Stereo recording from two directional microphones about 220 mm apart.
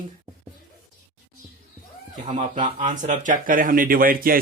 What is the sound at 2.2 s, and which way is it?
Speech, 25° right (ahead or behind).